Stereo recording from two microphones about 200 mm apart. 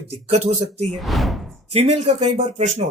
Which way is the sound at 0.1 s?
30° right (ahead or behind).